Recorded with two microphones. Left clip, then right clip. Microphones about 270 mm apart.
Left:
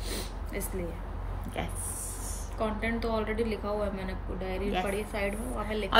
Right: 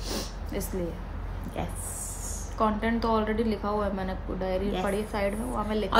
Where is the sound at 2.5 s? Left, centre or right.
Right.